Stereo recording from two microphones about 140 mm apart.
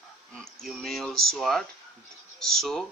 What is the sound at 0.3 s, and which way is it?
Speech, centre (ahead or behind).